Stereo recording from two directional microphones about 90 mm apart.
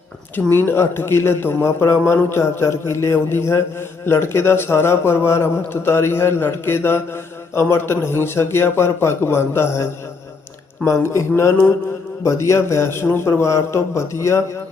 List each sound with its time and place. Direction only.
0.3 s a man's voice: 20° left (ahead or behind)